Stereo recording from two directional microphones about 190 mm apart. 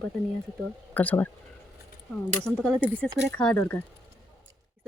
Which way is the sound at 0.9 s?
10° left (ahead or behind).